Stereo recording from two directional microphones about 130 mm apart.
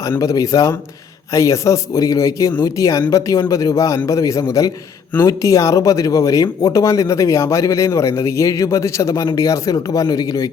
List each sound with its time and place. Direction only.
0.0 s speech: 25° left (ahead or behind)